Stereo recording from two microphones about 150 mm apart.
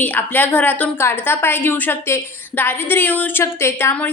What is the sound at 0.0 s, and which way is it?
A woman's voice, 10° left (ahead or behind).